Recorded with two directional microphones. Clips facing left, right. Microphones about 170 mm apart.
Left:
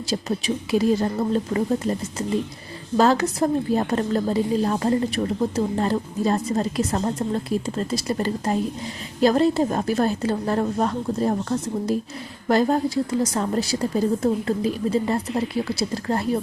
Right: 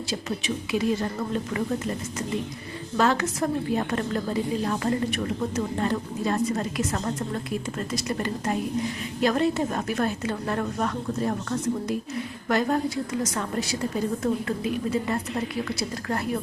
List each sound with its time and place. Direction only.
0.1 s a woman's voice: 35° left (ahead or behind)
3.0 s a woman's voice: 35° left (ahead or behind)